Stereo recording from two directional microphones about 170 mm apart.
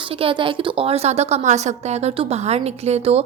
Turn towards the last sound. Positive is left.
turn(degrees=-35)  # may be behind; listen again after turning